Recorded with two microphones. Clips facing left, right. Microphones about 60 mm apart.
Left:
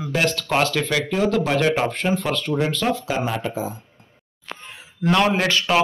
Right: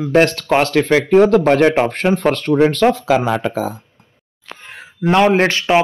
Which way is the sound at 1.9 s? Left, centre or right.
Right.